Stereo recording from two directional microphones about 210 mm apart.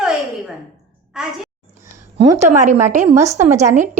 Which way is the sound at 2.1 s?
35° right (ahead or behind).